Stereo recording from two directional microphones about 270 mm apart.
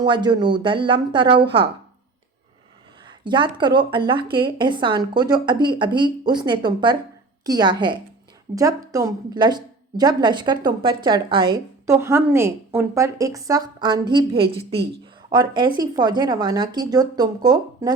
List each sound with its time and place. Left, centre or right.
0.0 s a woman's voice: centre
3.1 s a woman's voice: centre